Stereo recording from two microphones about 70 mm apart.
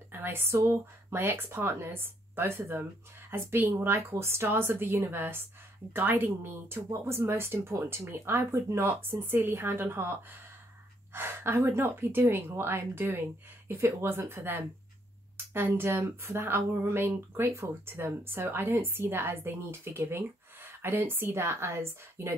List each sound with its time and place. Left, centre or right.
0.1 s speech: right
6.9 s speech: right
11.1 s speech: right